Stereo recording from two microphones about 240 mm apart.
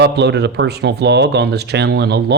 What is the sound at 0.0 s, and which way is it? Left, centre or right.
Speech, right.